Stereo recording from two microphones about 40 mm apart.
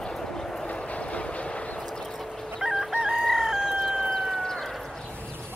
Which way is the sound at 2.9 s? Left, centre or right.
Centre.